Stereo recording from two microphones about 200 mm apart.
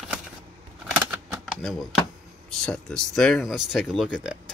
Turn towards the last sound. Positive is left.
turn(degrees=-5)  # may be behind; listen again after turning